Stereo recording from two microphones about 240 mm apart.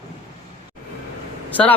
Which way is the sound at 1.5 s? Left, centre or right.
Centre.